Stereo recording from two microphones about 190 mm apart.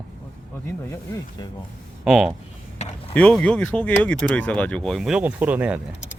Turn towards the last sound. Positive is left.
turn(degrees=-5)  # may be behind; listen again after turning